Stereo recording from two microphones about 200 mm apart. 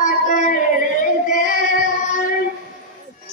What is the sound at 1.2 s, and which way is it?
Female singing, 40° left (ahead or behind).